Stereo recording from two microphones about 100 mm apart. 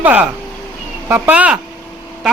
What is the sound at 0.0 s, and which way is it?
Speech, 15° right (ahead or behind).